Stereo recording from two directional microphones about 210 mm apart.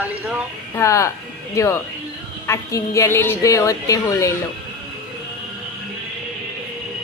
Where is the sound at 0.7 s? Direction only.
15° left (ahead or behind).